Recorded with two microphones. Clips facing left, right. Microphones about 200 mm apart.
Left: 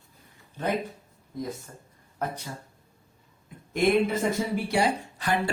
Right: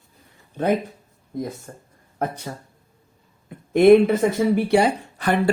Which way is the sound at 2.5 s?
75° right (ahead or behind).